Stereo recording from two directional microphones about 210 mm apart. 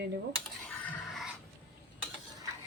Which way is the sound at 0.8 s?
Centre (ahead or behind).